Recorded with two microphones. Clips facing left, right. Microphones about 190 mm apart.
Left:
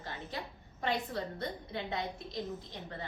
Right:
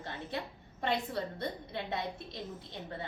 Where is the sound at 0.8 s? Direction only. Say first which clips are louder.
Right 1 dB; 25° right (ahead or behind).